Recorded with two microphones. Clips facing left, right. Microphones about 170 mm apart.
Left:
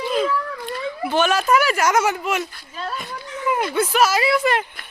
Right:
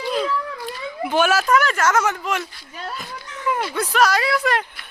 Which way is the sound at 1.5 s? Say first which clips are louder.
Left 1 dB; 10° left (ahead or behind).